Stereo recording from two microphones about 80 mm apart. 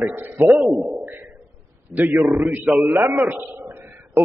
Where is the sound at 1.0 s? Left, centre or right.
Right.